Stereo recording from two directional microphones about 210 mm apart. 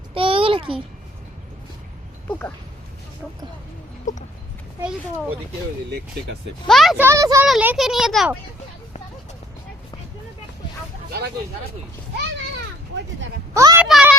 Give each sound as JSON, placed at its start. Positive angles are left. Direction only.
{"t": 0.1, "sound": "a sound", "side_deg": -25}
{"t": 6.7, "sound": "a child's voice", "side_deg": 0}
{"t": 7.0, "sound": "a child's voice", "side_deg": -15}
{"t": 13.5, "sound": "speech", "side_deg": -15}
{"t": 13.8, "sound": "a child's voice", "side_deg": -5}